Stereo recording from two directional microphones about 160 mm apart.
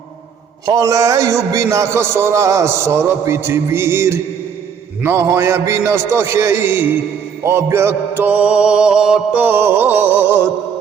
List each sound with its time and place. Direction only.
0.6 s a man's voice: 20° right (ahead or behind)